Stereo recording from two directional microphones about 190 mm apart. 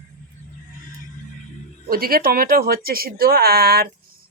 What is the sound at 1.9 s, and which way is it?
A woman's voice, 50° right (ahead or behind).